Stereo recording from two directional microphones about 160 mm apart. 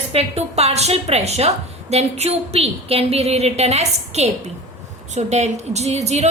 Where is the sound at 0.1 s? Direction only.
40° right (ahead or behind).